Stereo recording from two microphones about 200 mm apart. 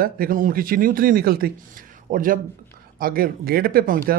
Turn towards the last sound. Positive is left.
turn(degrees=-45)  # may be behind; listen again after turning